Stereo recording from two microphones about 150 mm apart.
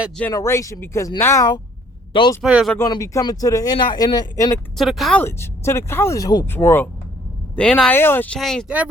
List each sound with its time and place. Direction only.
0.2 s speech: 20° left (ahead or behind)
2.4 s speech: 5° right (ahead or behind)
2.7 s speech: 25° left (ahead or behind)
4.8 s speech: centre (ahead or behind)
5.2 s speech: 15° left (ahead or behind)
8.4 s speech: centre (ahead or behind)